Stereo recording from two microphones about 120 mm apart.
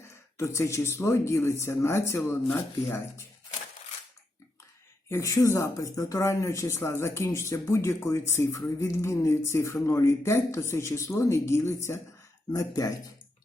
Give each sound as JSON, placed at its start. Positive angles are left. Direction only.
{"t": 0.3, "sound": "speech", "side_deg": 25}
{"t": 5.0, "sound": "speech", "side_deg": 25}
{"t": 12.5, "sound": "speech", "side_deg": 30}